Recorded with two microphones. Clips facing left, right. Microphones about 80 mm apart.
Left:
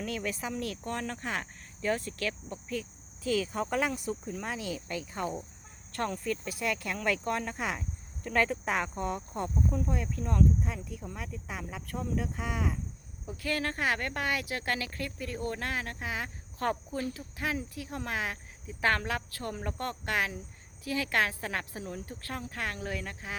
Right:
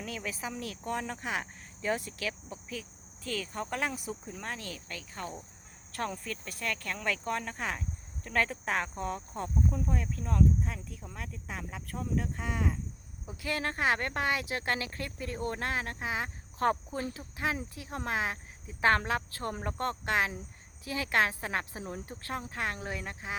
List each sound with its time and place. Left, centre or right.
0.0 s speech: centre
3.2 s speech: centre
5.9 s speech: centre
13.2 s speech: centre